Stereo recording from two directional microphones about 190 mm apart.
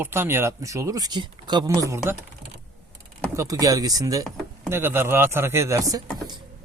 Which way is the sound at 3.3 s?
15° right (ahead or behind).